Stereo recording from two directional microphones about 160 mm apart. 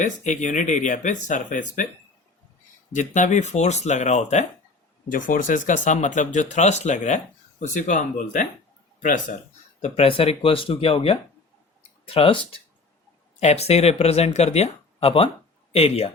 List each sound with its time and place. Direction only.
0.0 s speech: 50° left (ahead or behind)
2.9 s speech: 50° left (ahead or behind)
9.8 s speech: 40° left (ahead or behind)
11.8 s a sound: 35° left (ahead or behind)
13.4 s speech: 40° left (ahead or behind)